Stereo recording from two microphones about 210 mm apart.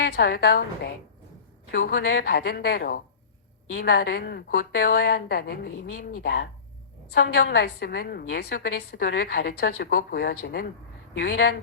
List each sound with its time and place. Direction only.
0.0 s a woman's voice: 50° left (ahead or behind)